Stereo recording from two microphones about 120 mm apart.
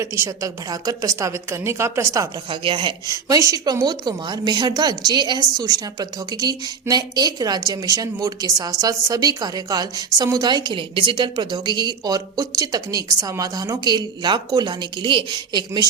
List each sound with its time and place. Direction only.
0.0 s a woman's voice: 25° right (ahead or behind)
2.5 s speech: 45° right (ahead or behind)
3.1 s a woman's voice: 25° right (ahead or behind)